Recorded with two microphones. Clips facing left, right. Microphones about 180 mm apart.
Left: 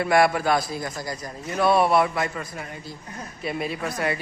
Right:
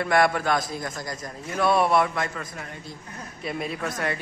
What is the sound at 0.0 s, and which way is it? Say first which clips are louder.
A man's voice: left 2 dB; 5° left (ahead or behind).